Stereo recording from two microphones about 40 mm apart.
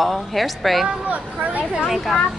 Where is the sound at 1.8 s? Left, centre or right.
Centre.